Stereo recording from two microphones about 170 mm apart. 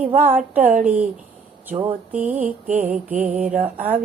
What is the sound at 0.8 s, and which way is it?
Mantra, 10° right (ahead or behind).